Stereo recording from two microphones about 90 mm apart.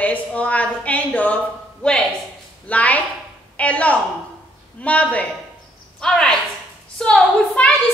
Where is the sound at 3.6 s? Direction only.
15° left (ahead or behind).